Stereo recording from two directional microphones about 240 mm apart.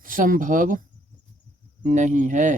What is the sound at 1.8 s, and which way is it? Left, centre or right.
Speech, right.